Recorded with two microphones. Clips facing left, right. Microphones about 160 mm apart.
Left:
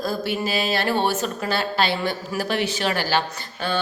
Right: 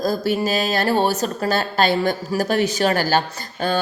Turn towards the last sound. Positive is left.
turn(degrees=-45)  # may be behind; listen again after turning